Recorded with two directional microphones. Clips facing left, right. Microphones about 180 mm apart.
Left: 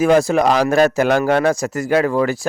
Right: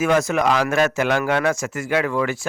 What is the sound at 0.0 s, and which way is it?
A man's voice, 35° left (ahead or behind).